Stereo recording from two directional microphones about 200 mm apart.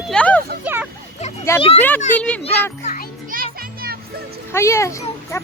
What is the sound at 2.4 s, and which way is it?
Speech, 35° left (ahead or behind).